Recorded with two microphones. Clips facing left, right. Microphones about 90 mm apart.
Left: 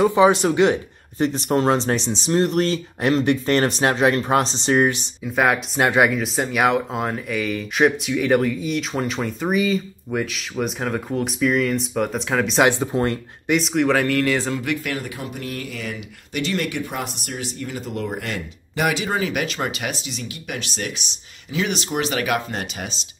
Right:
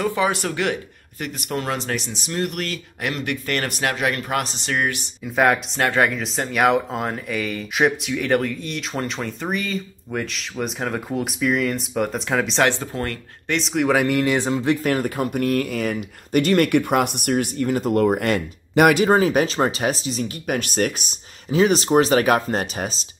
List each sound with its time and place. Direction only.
0.0 s speech: 20° left (ahead or behind)
5.2 s speech: centre (ahead or behind)
5.8 s speech: 15° left (ahead or behind)
12.6 s speech: 15° left (ahead or behind)
13.5 s speech: centre (ahead or behind); by 14.7 s 20° right (ahead or behind)
14.7 s speech: 40° right (ahead or behind); by 19.0 s 55° right (ahead or behind)
19.0 s speech: 35° right (ahead or behind)